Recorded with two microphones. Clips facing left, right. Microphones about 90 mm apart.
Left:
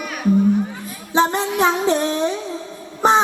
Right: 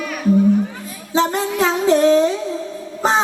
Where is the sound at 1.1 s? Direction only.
20° left (ahead or behind).